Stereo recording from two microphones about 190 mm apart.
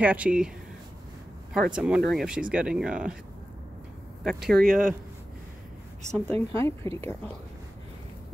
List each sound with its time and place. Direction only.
0.0 s speech: 5° right (ahead or behind)
1.5 s speech: 5° right (ahead or behind)
4.2 s speech: centre (ahead or behind)
4.6 s speech: 45° right (ahead or behind)
6.1 s a woman's voice: 5° left (ahead or behind)